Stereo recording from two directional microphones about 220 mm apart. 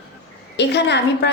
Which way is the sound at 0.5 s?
50° left (ahead or behind).